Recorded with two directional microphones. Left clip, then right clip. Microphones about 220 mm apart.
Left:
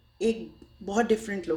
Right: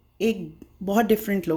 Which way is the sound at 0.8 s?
45° right (ahead or behind).